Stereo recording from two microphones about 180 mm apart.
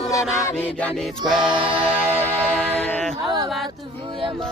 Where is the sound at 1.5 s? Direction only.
30° right (ahead or behind).